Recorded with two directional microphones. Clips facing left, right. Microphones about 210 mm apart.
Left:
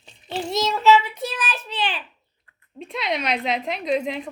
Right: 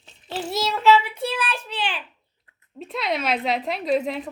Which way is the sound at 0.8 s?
10° right (ahead or behind).